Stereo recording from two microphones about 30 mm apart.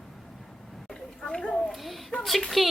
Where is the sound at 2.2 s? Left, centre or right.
Centre.